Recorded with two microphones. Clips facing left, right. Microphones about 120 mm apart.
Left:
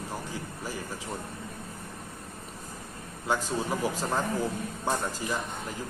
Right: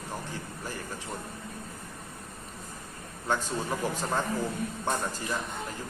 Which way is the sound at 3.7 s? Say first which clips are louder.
Even; 10° left (ahead or behind).